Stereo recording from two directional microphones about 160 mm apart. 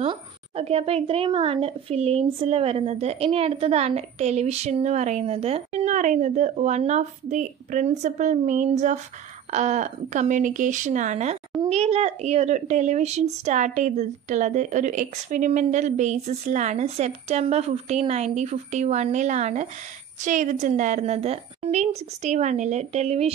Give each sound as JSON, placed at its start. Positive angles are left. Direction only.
{"t": 0.0, "sound": "a woman's voice", "side_deg": -40}